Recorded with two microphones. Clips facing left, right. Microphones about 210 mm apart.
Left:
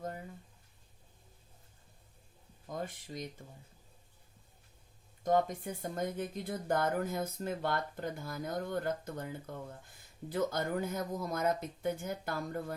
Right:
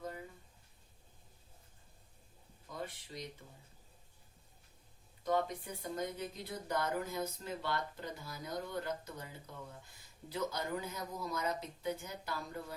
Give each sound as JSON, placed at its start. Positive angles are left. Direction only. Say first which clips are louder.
{"t": 2.6, "sound": "speech", "louder": "left 4 dB", "side_deg": 45}
{"t": 5.2, "sound": "speech", "louder": "left 4 dB", "side_deg": 45}